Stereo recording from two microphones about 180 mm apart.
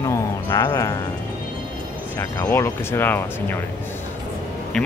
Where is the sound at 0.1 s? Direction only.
20° left (ahead or behind).